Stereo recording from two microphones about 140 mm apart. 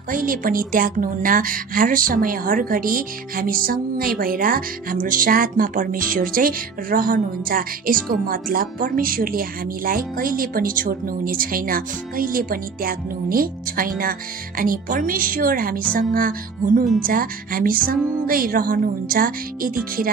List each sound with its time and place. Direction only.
0.1 s speech: 80° right